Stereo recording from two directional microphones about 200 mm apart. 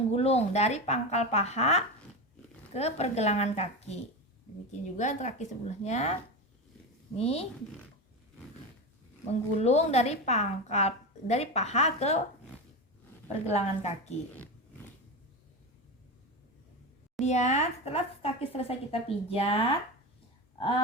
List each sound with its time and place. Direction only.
0.1 s a woman's voice: 30° left (ahead or behind)
7.2 s a woman's voice: 30° left (ahead or behind)
9.6 s a woman's voice: 30° left (ahead or behind)
13.2 s a woman's voice: 35° left (ahead or behind)
17.2 s a woman's voice: 35° left (ahead or behind)
20.6 s a sound: 25° left (ahead or behind)